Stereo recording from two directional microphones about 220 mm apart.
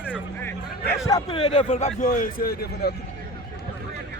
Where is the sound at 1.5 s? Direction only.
25° left (ahead or behind).